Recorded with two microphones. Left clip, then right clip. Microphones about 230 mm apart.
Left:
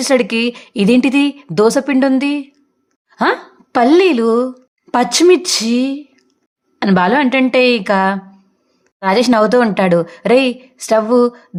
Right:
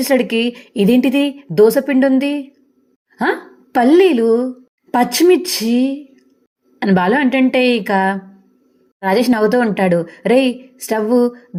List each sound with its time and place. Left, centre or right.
0.0 s a woman's voice: centre